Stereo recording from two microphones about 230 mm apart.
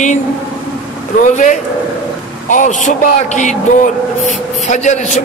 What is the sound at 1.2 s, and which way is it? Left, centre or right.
A man's voice, left.